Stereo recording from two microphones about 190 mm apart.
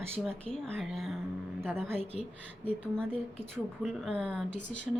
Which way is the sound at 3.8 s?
Centre (ahead or behind).